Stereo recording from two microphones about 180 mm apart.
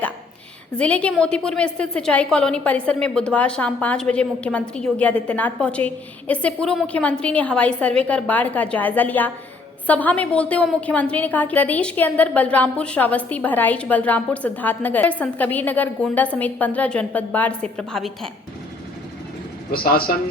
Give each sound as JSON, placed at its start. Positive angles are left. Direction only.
{"t": 0.8, "sound": "a woman's voice", "side_deg": 5}
{"t": 19.7, "sound": "speech", "side_deg": 55}